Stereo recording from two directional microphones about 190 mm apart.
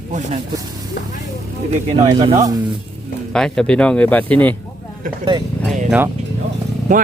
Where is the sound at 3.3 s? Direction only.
5° left (ahead or behind).